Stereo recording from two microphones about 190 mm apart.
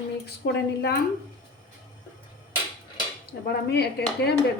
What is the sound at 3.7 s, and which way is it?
Speech, 60° left (ahead or behind).